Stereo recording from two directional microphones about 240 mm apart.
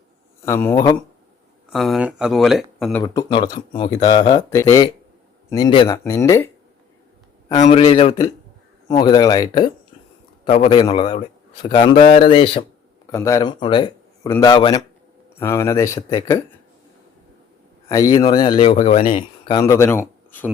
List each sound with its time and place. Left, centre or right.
0.4 s speech: centre
1.7 s speech: centre
3.0 s speech: centre
7.5 s a man's voice: left
17.8 s speech: centre